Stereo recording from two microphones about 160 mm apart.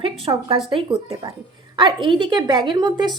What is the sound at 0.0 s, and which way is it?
A woman's voice, 35° right (ahead or behind).